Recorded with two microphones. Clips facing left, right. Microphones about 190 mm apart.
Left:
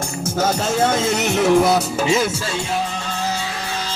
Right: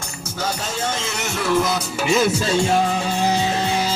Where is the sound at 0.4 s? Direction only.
50° left (ahead or behind).